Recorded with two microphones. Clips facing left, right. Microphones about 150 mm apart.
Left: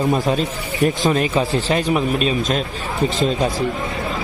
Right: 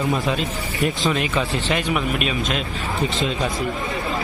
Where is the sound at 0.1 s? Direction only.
35° left (ahead or behind).